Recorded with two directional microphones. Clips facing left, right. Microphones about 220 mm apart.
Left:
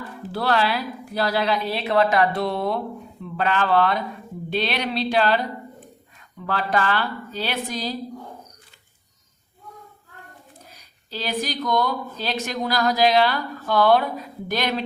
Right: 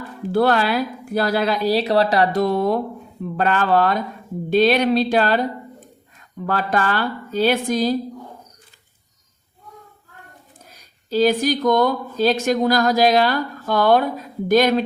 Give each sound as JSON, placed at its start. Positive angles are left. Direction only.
{"t": 0.3, "sound": "speech", "side_deg": -50}
{"t": 6.4, "sound": "speech", "side_deg": -45}
{"t": 11.1, "sound": "speech", "side_deg": -45}